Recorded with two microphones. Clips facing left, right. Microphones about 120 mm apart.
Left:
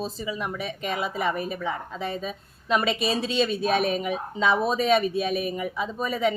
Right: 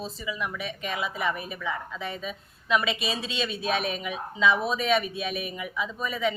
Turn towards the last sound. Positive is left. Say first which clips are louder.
# left 3 dB
turn(degrees=40)  # may be behind; listen again after turning